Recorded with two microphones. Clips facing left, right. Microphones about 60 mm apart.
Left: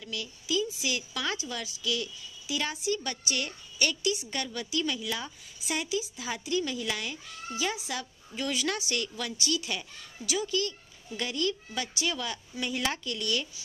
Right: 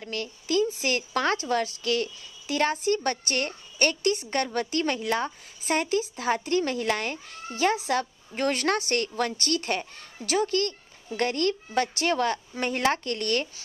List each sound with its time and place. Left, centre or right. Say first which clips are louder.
0.0 s speech: right 5 dB; right